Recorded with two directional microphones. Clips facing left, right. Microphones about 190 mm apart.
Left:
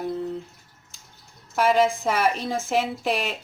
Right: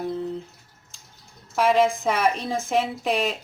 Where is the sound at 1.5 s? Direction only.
Centre (ahead or behind).